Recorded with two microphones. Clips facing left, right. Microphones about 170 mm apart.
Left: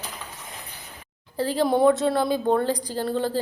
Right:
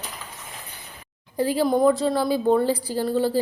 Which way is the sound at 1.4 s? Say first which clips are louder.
Right 2 dB; 10° right (ahead or behind).